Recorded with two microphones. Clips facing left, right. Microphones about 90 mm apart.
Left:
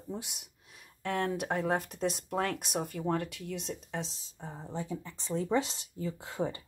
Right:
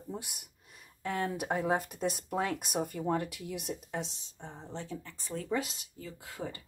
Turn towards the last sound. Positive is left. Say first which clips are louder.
# left 6 dB
turn(degrees=25)  # may be behind; listen again after turning